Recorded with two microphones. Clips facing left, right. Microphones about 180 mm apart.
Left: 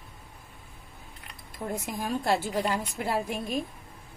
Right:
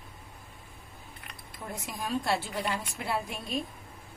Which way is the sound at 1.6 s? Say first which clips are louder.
Left 5 dB; 40° left (ahead or behind).